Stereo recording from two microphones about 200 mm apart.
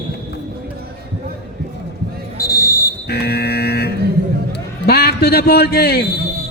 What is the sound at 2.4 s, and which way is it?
Basketball bounce, 15° left (ahead or behind).